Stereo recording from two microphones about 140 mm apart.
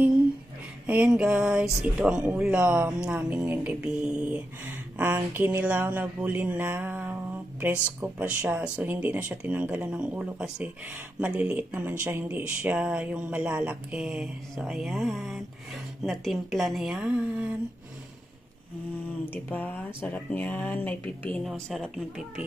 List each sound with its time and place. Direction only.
0.8 s a woman's voice: 10° right (ahead or behind)
19.3 s a woman's voice: 10° left (ahead or behind)